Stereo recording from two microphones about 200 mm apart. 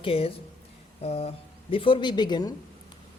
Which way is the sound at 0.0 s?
30° left (ahead or behind).